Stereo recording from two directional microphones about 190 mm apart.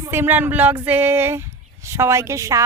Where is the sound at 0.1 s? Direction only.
10° right (ahead or behind).